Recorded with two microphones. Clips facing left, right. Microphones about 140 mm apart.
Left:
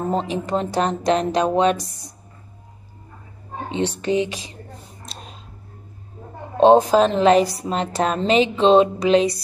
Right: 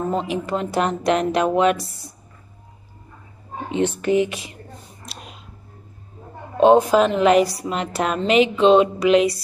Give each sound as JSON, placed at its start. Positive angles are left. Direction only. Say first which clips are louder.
{"t": 0.1, "sound": "a woman's voice", "louder": "left 1 dB", "side_deg": 35}
{"t": 1.8, "sound": "speech", "louder": "right 1 dB", "side_deg": 20}
{"t": 4.0, "sound": "speech", "louder": "right 2 dB", "side_deg": 25}
{"t": 6.6, "sound": "a woman's voice", "louder": "left 1 dB", "side_deg": 30}